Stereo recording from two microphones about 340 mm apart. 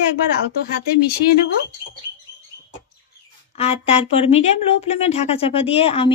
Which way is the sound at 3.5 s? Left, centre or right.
Centre.